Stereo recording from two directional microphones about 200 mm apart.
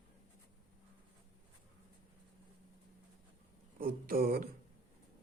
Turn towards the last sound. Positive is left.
turn(degrees=-45)  # may be behind; listen again after turning